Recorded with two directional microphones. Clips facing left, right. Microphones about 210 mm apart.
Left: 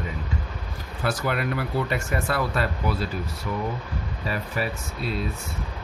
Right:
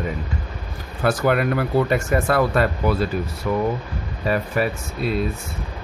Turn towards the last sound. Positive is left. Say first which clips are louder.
# right 6 dB
turn(degrees=-55)  # may be behind; listen again after turning